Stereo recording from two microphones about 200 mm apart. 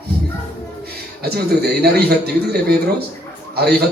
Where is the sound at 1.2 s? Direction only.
50° right (ahead or behind).